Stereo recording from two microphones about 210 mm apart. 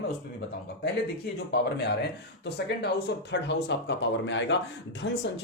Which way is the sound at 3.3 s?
55° left (ahead or behind).